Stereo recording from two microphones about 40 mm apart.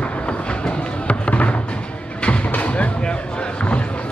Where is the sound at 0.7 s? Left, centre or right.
Left.